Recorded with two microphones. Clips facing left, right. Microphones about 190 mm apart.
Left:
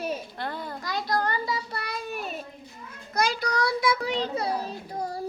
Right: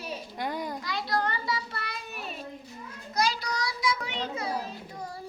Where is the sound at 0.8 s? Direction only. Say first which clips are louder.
Left 5 dB; 45° left (ahead or behind).